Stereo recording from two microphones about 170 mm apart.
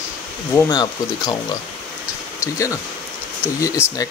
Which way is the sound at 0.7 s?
25° left (ahead or behind).